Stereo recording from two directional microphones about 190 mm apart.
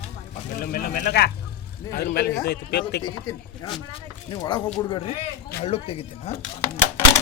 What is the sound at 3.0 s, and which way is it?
A man's voice, 20° left (ahead or behind).